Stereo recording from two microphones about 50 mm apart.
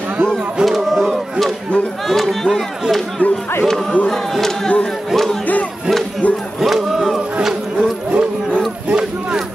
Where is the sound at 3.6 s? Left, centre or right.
Centre.